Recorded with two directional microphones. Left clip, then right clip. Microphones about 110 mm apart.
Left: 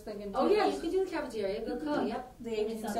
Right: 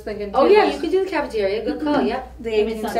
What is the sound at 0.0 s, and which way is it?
Speech, 25° left (ahead or behind).